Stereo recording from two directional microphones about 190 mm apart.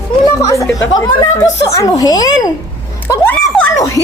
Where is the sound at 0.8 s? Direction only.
20° left (ahead or behind).